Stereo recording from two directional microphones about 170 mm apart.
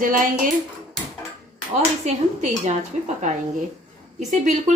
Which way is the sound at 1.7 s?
45° right (ahead or behind).